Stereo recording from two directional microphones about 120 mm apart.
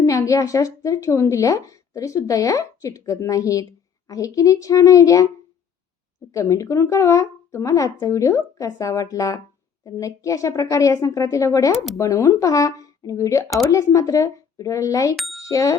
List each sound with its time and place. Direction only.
0.0 s a woman's voice: 25° left (ahead or behind)
6.3 s a woman's voice: 25° left (ahead or behind)
15.1 s speech: centre (ahead or behind)
15.4 s speech: 25° left (ahead or behind)